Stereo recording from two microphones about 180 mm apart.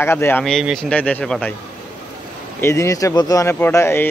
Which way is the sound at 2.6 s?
15° left (ahead or behind).